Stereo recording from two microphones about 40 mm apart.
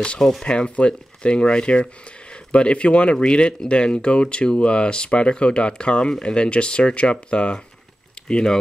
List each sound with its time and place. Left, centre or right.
0.4 s speech: left